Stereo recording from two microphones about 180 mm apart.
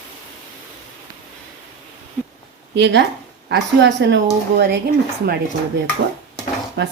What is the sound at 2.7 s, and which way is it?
Speech, 75° right (ahead or behind).